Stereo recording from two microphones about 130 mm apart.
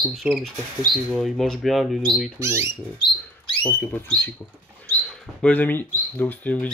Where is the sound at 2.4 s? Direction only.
20° right (ahead or behind).